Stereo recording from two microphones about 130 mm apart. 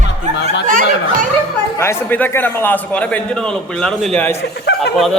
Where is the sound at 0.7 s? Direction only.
90° right.